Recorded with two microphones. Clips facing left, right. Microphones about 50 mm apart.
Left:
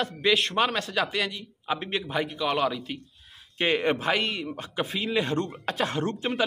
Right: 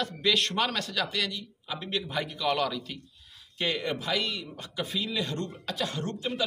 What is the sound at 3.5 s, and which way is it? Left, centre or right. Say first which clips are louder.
A man's voice: left 6 dB; left.